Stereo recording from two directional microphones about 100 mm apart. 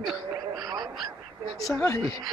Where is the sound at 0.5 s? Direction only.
40° right (ahead or behind).